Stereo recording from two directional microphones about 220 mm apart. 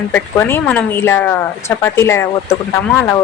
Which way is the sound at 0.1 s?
10° left (ahead or behind).